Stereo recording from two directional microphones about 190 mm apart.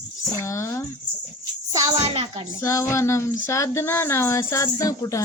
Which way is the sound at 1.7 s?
30° right (ahead or behind).